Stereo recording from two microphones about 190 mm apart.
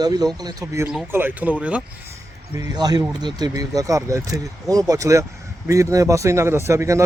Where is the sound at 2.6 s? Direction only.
20° right (ahead or behind).